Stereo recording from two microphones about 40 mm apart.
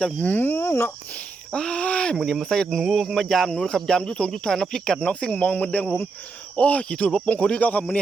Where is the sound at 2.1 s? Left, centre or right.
Centre.